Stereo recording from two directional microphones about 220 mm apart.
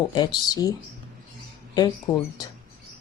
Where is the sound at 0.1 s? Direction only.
20° left (ahead or behind).